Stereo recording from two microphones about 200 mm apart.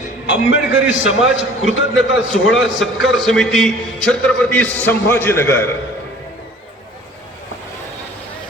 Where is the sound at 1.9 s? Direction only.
65° left (ahead or behind).